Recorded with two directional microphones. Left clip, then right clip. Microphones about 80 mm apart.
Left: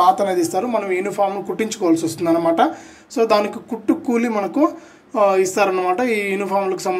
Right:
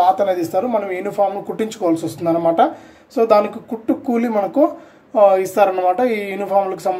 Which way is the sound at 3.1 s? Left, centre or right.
Centre.